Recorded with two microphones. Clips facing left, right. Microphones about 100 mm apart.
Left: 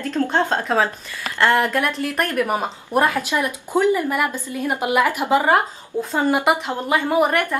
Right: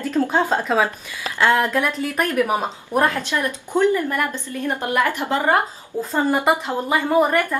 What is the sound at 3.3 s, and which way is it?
A woman's voice, 15° left (ahead or behind).